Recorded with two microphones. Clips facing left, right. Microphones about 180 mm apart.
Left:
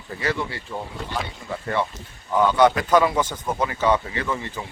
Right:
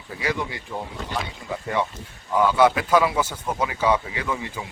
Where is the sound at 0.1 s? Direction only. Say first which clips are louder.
Left 1 dB; 10° right (ahead or behind).